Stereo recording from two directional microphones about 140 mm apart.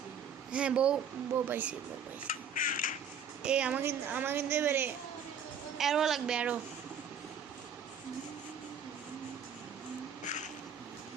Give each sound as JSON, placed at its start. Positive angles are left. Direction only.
{"t": 0.5, "sound": "a woman's voice", "side_deg": -5}
{"t": 2.2, "sound": "a sound", "side_deg": 75}
{"t": 3.4, "sound": "a woman's voice", "side_deg": -5}
{"t": 5.7, "sound": "a woman's voice", "side_deg": 0}
{"t": 10.2, "sound": "cat", "side_deg": 60}